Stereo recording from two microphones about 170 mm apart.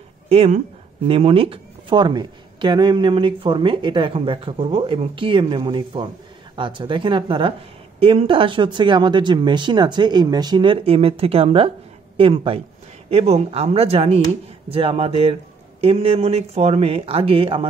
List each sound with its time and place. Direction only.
0.3 s a woman's voice: 35° right (ahead or behind)